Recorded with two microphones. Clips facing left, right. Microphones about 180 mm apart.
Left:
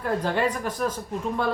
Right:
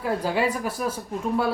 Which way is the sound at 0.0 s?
10° right (ahead or behind).